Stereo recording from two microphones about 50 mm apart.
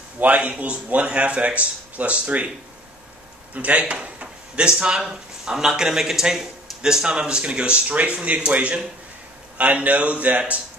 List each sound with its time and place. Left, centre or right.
0.2 s speech: right
3.5 s speech: right